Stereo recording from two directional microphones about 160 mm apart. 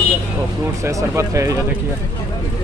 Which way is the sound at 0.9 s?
20° right (ahead or behind).